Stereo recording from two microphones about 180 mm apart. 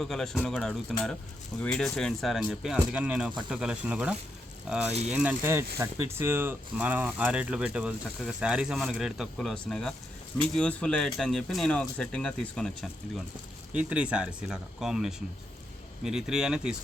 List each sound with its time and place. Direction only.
0.0 s speech: centre (ahead or behind)